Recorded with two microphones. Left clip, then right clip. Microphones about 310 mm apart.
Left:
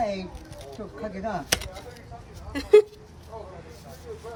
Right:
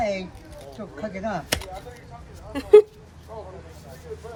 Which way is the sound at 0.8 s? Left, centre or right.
Right.